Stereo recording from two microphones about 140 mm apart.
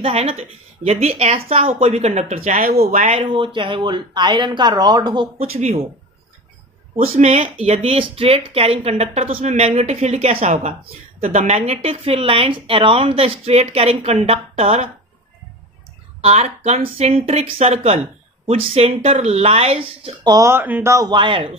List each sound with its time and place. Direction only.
0.0 s speech: 45° right (ahead or behind)
3.3 s speech: 35° right (ahead or behind)
7.2 s speech: 55° right (ahead or behind)
16.2 s speech: 50° right (ahead or behind)
20.2 s speech: 20° right (ahead or behind)